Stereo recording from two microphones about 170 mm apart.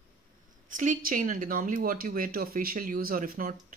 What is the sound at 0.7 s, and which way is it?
Speech, 50° right (ahead or behind).